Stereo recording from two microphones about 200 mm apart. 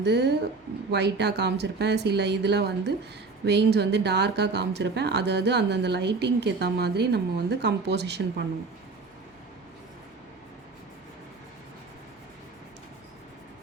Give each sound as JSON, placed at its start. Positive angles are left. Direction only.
{"t": 0.0, "sound": "speech", "side_deg": -55}